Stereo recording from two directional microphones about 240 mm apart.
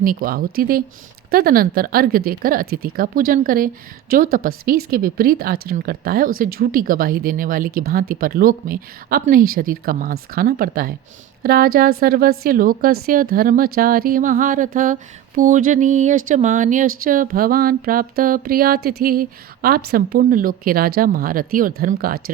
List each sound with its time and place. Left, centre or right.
0.0 s speech: right